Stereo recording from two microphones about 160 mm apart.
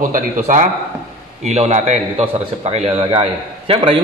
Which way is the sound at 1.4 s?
45° right (ahead or behind).